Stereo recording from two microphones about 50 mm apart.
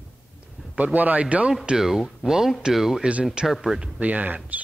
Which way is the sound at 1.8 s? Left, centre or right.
Centre.